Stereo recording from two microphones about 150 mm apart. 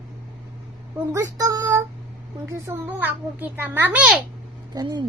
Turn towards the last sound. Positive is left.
turn(degrees=-25)  # may be behind; listen again after turning